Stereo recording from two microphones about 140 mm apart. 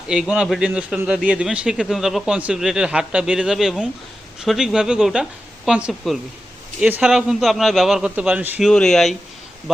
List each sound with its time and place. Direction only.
0.1 s a man's voice: 5° right (ahead or behind)
8.6 s a man's voice: 5° left (ahead or behind)